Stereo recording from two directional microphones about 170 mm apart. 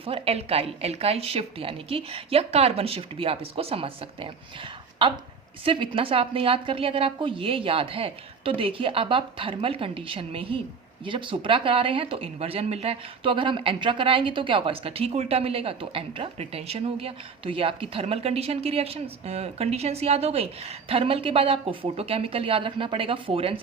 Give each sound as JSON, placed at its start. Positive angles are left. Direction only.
{"t": 0.0, "sound": "a woman's voice", "side_deg": -35}